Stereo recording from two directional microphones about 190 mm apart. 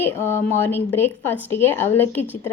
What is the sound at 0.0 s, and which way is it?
A woman's voice, 10° left (ahead or behind).